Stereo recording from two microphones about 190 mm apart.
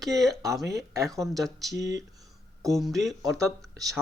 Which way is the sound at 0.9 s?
15° right (ahead or behind).